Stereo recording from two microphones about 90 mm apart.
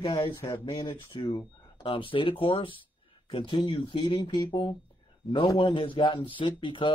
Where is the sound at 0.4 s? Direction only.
65° left (ahead or behind); by 4.2 s 80° left.